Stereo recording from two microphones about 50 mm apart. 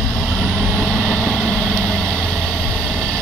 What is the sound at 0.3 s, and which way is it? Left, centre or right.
Vehicle, left.